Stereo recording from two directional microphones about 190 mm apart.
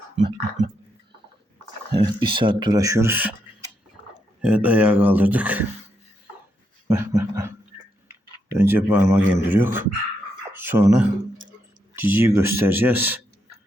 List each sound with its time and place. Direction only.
1.9 s speech: 25° right (ahead or behind)
4.4 s speech: 5° right (ahead or behind)
6.8 s dog: 15° right (ahead or behind)
8.4 s speech: 10° right (ahead or behind)